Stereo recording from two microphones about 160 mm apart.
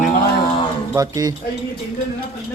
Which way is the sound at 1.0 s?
25° right (ahead or behind).